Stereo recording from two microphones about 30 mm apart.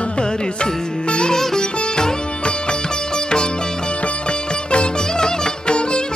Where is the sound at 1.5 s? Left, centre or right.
Left.